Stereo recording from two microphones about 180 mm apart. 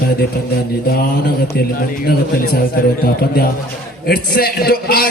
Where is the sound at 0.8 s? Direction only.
55° left (ahead or behind).